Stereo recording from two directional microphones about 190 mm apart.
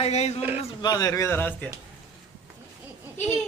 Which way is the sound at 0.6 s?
20° left (ahead or behind).